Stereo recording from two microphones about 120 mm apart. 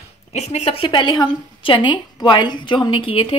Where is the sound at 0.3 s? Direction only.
65° left (ahead or behind).